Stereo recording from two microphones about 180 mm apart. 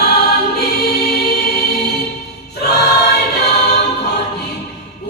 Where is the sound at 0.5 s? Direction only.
60° left (ahead or behind).